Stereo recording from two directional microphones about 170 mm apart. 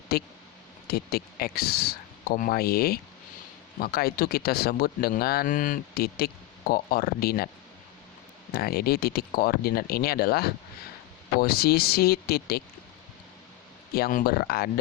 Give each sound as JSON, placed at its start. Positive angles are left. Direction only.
{"t": 0.1, "sound": "speech", "side_deg": 65}
{"t": 8.5, "sound": "speech", "side_deg": 65}
{"t": 13.9, "sound": "speech", "side_deg": 60}